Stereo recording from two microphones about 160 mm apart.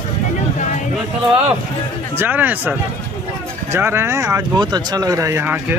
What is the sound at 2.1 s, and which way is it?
Speech, 10° right (ahead or behind).